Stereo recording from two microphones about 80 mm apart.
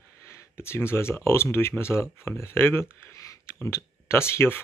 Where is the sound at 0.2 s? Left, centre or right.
Left.